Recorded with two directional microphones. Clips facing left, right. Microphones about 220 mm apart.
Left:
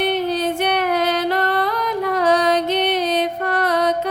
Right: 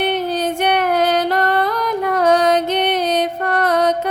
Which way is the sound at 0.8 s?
45° right (ahead or behind).